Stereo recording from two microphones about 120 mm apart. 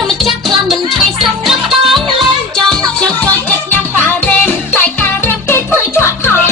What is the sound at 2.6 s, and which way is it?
Music, 5° left (ahead or behind).